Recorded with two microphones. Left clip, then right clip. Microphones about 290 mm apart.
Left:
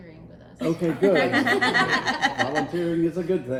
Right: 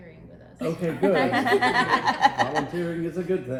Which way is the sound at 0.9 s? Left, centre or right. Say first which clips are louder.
Left 1 dB; centre.